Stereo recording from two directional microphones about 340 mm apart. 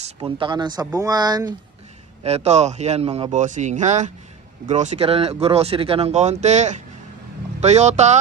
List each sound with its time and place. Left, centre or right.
0.0 s speech: centre